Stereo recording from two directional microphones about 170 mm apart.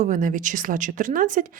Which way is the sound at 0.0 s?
50° right (ahead or behind).